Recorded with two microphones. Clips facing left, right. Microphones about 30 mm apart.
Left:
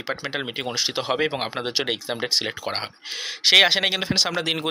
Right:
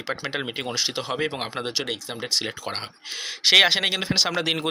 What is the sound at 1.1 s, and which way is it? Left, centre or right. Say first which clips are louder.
Speech: left 3 dB; centre.